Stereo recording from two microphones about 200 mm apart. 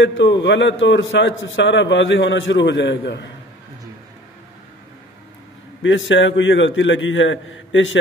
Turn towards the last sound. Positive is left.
turn(degrees=70)  # may be behind; listen again after turning